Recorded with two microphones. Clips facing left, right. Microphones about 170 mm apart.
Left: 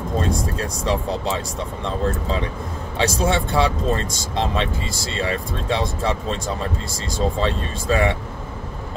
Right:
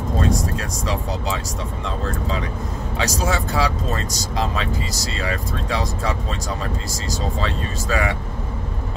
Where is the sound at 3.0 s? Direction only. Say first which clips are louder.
Left 3 dB; 30° left (ahead or behind).